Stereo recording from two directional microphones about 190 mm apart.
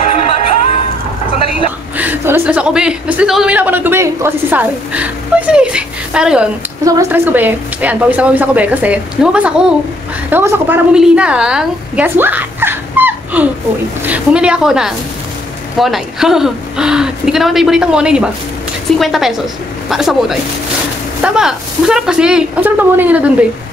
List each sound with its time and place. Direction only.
0.0 s music: 30° left (ahead or behind)
2.0 s a woman's voice: 10° right (ahead or behind)
6.8 s a woman's voice: 15° right (ahead or behind)